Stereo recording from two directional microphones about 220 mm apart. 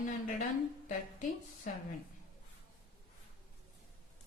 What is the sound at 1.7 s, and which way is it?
Speech, 35° left (ahead or behind).